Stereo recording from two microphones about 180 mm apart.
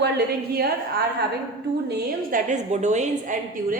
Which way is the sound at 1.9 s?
65° right (ahead or behind).